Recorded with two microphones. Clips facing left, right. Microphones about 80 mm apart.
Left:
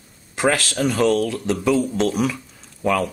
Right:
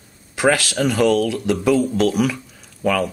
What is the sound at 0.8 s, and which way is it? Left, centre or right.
Speech, centre.